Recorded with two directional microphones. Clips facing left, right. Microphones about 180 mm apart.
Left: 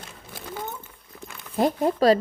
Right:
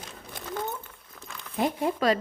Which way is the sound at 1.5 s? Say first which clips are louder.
Left 5 dB; 35° left (ahead or behind).